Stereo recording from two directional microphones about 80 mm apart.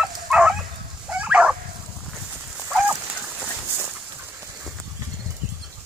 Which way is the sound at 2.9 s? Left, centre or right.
Centre.